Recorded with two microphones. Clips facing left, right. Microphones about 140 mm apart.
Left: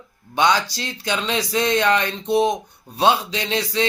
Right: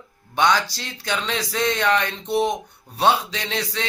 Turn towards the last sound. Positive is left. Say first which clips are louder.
# left 5 dB
turn(degrees=20)  # may be behind; listen again after turning